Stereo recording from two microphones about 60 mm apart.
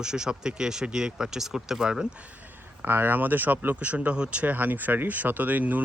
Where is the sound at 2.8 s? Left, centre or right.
Right.